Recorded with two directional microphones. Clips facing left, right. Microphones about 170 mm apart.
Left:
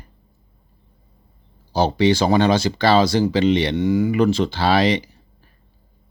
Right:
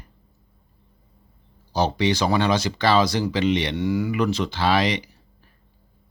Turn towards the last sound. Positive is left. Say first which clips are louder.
# left 4 dB
turn(degrees=30)  # may be behind; listen again after turning